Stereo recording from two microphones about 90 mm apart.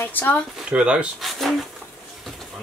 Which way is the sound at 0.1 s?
20° left (ahead or behind).